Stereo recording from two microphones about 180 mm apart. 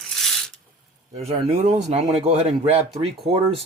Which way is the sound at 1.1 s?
35° right (ahead or behind).